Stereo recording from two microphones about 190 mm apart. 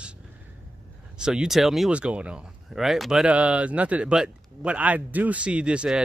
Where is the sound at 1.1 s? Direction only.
5° right (ahead or behind).